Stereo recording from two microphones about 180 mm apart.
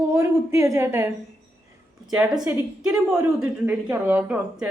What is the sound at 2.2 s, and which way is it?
A woman's voice, 20° right (ahead or behind).